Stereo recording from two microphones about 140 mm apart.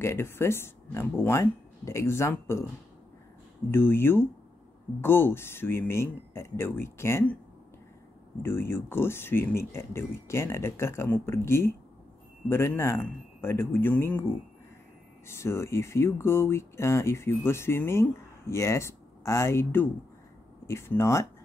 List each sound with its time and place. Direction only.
0.0 s speech: 15° left (ahead or behind)
3.7 s speech: 15° left (ahead or behind)
8.4 s speech: 15° left (ahead or behind)